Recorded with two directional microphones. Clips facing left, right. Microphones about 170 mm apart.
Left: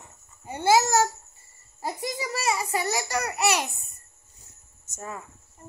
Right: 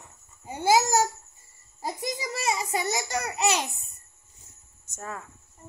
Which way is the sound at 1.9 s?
20° right (ahead or behind).